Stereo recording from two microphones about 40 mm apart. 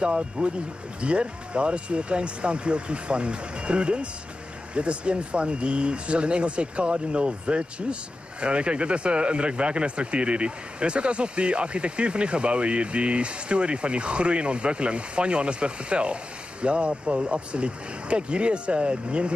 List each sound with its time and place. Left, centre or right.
0.0 s speech: right